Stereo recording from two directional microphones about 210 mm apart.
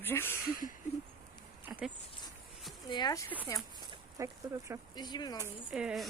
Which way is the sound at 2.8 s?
20° left (ahead or behind).